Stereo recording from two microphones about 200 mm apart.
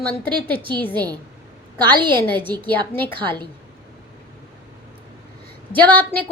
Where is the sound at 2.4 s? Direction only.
10° left (ahead or behind).